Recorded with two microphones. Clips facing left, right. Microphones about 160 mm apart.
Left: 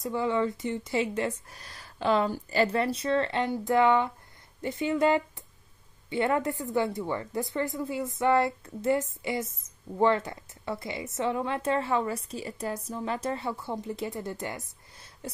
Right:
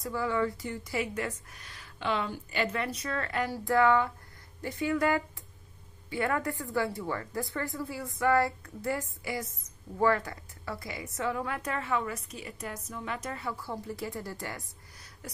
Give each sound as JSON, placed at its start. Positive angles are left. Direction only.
{"t": 0.0, "sound": "a woman's voice", "side_deg": 20}